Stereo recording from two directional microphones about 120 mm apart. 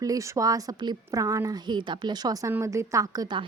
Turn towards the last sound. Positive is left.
turn(degrees=-35)  # may be behind; listen again after turning